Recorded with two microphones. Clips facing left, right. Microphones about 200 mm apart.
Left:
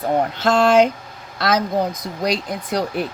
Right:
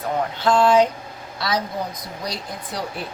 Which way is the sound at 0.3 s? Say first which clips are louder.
Left 1 dB; 85° left.